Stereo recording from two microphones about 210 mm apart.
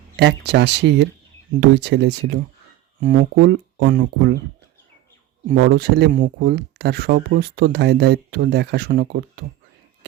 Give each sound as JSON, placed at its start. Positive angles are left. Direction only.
{"t": 0.2, "sound": "speech", "side_deg": -50}
{"t": 3.0, "sound": "speech", "side_deg": -40}
{"t": 5.5, "sound": "speech", "side_deg": -50}